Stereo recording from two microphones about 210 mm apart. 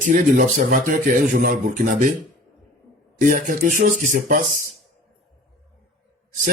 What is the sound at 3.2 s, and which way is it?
Speech, 40° right (ahead or behind).